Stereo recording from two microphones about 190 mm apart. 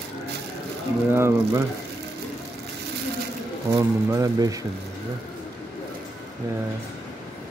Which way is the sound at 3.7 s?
20° right (ahead or behind).